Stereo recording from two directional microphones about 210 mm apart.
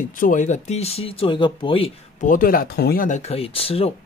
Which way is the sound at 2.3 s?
40° left (ahead or behind).